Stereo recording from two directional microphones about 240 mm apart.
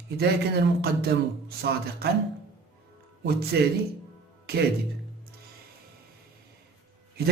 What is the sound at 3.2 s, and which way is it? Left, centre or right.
Speech, right.